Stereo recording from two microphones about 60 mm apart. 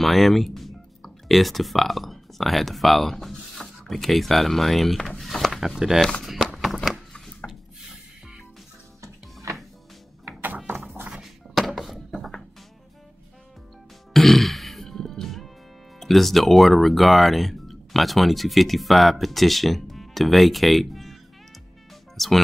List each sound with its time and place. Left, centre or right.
0.0 s speech: centre
5.2 s a sound: centre
9.0 s music: right
11.5 s thunk: centre
14.1 s music: centre
16.0 s speech: centre
22.1 s music: centre